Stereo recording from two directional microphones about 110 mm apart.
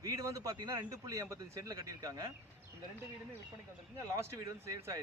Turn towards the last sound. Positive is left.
turn(degrees=-30)  # may be behind; listen again after turning